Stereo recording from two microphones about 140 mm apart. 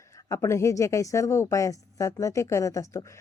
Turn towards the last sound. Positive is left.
turn(degrees=20)  # may be behind; listen again after turning